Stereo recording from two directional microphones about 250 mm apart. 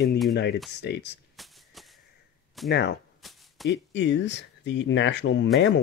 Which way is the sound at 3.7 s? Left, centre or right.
Left.